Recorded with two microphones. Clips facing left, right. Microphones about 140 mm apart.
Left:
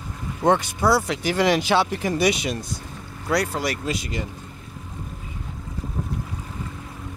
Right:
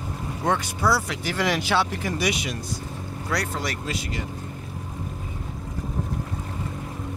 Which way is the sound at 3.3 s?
10° left (ahead or behind).